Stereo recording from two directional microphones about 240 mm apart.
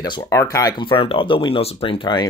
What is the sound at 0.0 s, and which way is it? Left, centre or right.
Speech, centre.